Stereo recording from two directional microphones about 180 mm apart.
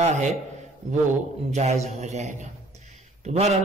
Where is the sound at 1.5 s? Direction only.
40° right (ahead or behind).